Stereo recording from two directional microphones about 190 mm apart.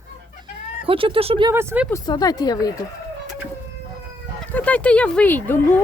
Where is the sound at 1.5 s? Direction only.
10° right (ahead or behind).